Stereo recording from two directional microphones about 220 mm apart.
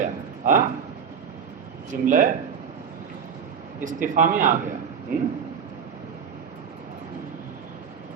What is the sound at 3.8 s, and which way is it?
Speech, 35° right (ahead or behind).